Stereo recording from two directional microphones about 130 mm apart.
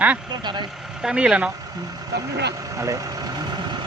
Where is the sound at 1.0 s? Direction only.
5° right (ahead or behind).